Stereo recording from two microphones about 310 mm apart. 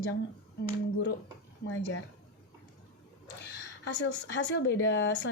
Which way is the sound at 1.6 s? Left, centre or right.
Left.